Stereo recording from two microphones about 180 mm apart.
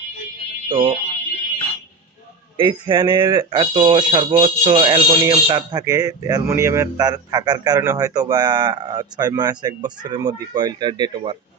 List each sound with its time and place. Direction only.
0.7 s speech: 30° right (ahead or behind)
2.6 s speech: 25° right (ahead or behind)